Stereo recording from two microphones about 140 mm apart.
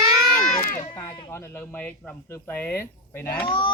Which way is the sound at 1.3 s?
15° left (ahead or behind).